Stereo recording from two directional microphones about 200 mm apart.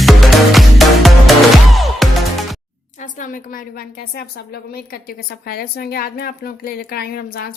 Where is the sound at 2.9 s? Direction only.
40° left (ahead or behind).